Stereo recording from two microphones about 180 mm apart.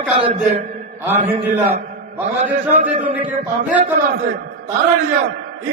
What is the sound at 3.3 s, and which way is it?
Speech, 10° right (ahead or behind).